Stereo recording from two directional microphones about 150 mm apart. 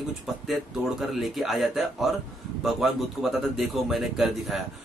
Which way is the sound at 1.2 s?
Centre (ahead or behind).